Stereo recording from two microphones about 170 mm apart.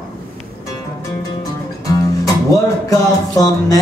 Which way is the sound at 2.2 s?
20° left (ahead or behind).